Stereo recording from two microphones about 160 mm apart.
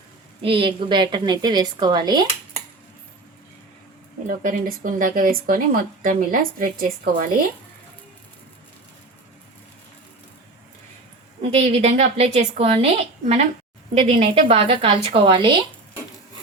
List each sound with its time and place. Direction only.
0.4 s a woman's voice: 35° right (ahead or behind)
4.3 s speech: 60° right (ahead or behind)
11.5 s a woman's voice: 40° right (ahead or behind)